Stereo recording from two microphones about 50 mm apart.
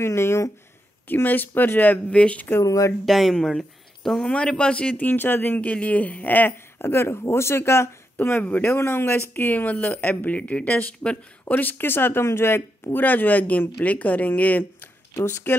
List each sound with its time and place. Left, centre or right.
0.0 s speech: left
1.0 s speech: left
2.0 s speech: left
3.1 s speech: centre
4.3 s speech: left
4.9 s speech: left
5.6 s speech: left
6.8 s speech: left
8.4 s speech: left
8.6 s speech: left
9.3 s speech: left
11.5 s speech: left
13.0 s speech: left
15.5 s speech: left